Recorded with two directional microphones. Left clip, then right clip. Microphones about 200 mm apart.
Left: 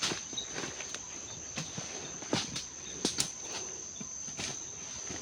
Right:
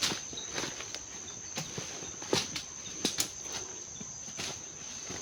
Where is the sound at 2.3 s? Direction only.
55° right (ahead or behind).